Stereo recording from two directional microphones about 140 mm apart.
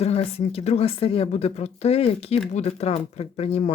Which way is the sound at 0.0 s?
45° left (ahead or behind).